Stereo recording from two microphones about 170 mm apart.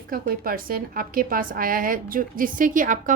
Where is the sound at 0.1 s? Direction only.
60° right (ahead or behind).